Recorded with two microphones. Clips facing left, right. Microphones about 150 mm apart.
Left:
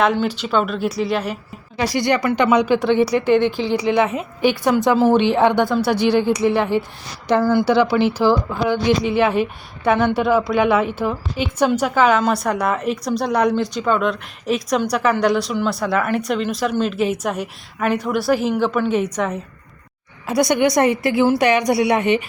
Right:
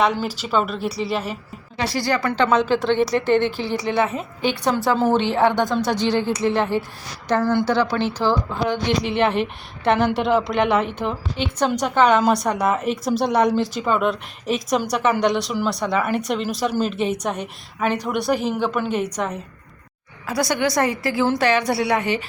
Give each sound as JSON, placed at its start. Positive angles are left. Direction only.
{"t": 0.0, "sound": "a woman's voice", "side_deg": -5}
{"t": 2.0, "sound": "speech", "side_deg": 20}
{"t": 8.5, "sound": "a woman's voice", "side_deg": 0}
{"t": 20.2, "sound": "a woman's voice", "side_deg": 20}